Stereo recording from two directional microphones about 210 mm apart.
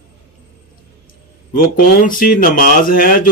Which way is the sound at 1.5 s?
40° left (ahead or behind).